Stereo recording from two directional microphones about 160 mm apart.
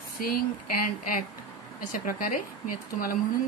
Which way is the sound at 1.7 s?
60° left (ahead or behind).